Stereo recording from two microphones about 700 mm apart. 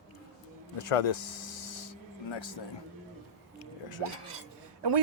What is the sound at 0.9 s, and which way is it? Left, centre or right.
Speech, left.